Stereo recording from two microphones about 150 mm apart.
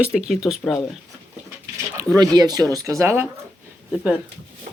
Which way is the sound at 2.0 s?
25° right (ahead or behind).